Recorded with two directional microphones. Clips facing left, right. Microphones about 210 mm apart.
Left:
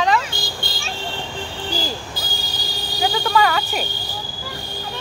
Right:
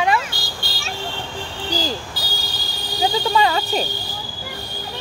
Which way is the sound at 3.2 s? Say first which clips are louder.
Left 2 dB; 25° right (ahead or behind).